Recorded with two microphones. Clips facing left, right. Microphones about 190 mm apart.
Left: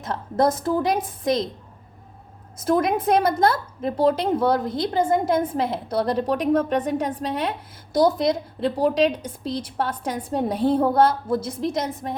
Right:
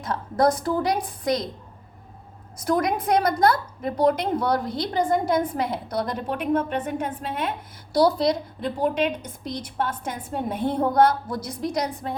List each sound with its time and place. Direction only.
0.0 s a woman's voice: 25° left (ahead or behind)
2.6 s a woman's voice: 25° left (ahead or behind)
7.9 s a woman's voice: 20° left (ahead or behind)